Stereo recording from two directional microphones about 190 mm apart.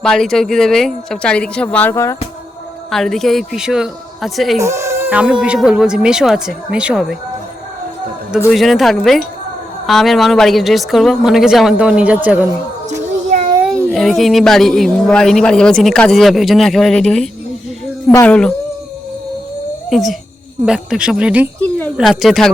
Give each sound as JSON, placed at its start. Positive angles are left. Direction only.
{"t": 0.0, "sound": "a man's voice", "side_deg": 5}
{"t": 2.9, "sound": "a man's voice", "side_deg": 0}
{"t": 4.6, "sound": "a man's voice", "side_deg": -15}
{"t": 8.5, "sound": "a man's voice", "side_deg": 0}
{"t": 13.3, "sound": "a sound", "side_deg": -45}
{"t": 13.9, "sound": "a man's voice", "side_deg": 0}
{"t": 19.9, "sound": "a man's voice", "side_deg": 0}